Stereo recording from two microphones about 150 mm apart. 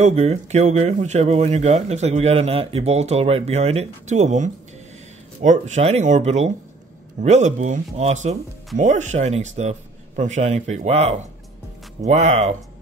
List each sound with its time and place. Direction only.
0.0 s speech: 45° right (ahead or behind)